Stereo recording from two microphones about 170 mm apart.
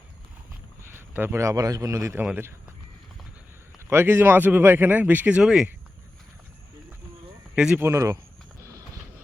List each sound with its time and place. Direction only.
0.8 s a man's voice: 15° right (ahead or behind)
3.8 s speech: 15° right (ahead or behind)
7.5 s speech: 5° right (ahead or behind)